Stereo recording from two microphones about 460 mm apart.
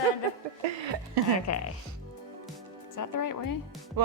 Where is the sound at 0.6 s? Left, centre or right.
Right.